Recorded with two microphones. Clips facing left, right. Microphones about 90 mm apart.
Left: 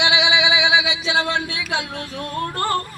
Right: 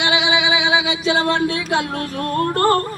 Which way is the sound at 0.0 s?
40° right (ahead or behind).